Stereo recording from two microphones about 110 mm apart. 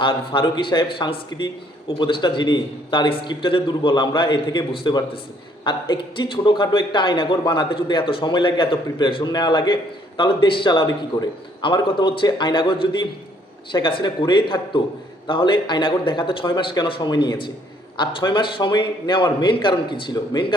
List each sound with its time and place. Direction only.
0.0 s a man's voice: 50° left (ahead or behind)